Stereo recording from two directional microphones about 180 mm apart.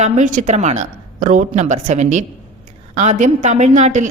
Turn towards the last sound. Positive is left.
turn(degrees=-40)  # may be behind; listen again after turning